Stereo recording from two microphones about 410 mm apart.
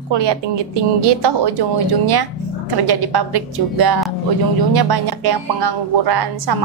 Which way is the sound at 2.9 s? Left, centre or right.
Right.